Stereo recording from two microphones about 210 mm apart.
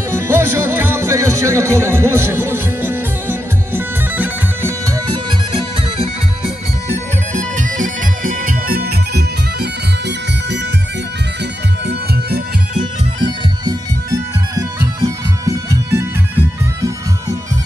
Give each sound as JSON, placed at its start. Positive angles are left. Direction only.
{"t": 0.1, "sound": "music", "side_deg": -10}
{"t": 11.8, "sound": "music", "side_deg": -50}
{"t": 13.2, "sound": "music", "side_deg": -15}